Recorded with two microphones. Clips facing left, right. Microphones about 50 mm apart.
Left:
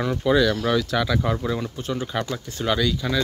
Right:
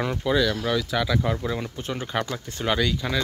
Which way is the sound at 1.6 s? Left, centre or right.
Right.